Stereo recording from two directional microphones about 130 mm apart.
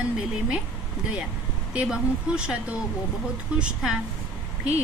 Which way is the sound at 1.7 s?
5° right (ahead or behind).